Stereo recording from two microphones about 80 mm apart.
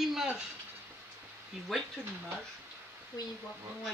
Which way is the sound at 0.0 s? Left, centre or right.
Centre.